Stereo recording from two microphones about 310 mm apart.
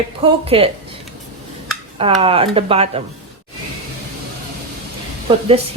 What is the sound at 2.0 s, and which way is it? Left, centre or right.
Speech, centre.